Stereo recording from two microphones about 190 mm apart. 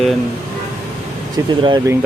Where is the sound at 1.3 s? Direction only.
20° right (ahead or behind).